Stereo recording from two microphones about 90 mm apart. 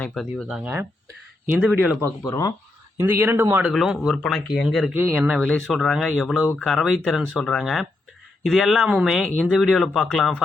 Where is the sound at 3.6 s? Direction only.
5° right (ahead or behind).